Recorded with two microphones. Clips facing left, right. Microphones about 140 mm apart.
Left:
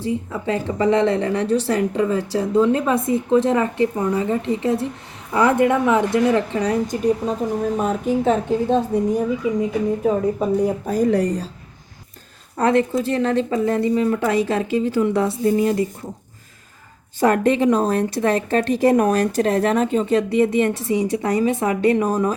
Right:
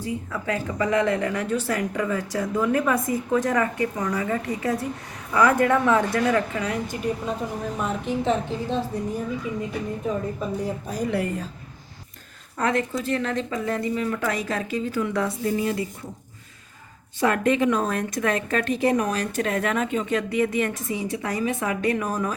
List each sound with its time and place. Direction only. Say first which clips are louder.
0.0 s a woman's voice: left 5 dB; 25° left (ahead or behind); by 8.8 s 50° left (ahead or behind)
10.1 s a woman's voice: left 7 dB; 60° left (ahead or behind); by 11.4 s 40° left (ahead or behind)
12.5 s speech: left 7 dB; 30° left (ahead or behind)
17.2 s speech: left 4 dB; 40° left (ahead or behind)